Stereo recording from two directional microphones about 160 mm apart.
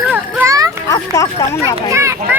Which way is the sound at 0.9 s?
20° left (ahead or behind).